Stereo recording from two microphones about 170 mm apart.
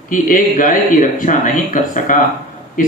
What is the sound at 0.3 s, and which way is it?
Speech, 50° left (ahead or behind).